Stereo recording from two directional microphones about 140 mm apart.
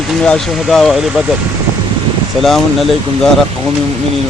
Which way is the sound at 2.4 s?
Centre (ahead or behind).